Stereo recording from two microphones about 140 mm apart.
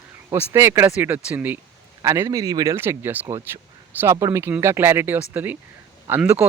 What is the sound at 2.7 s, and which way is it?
Speech, 15° right (ahead or behind).